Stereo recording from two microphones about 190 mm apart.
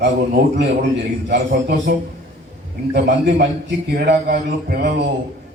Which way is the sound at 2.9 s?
60° right (ahead or behind).